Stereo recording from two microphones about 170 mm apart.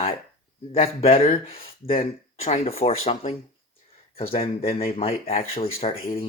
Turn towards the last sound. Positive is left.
turn(degrees=35)  # may be behind; listen again after turning